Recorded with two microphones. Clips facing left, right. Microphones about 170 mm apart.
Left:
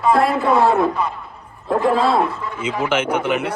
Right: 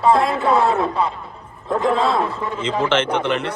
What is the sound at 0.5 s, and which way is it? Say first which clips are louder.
Speech: left 2 dB; 60° left (ahead or behind).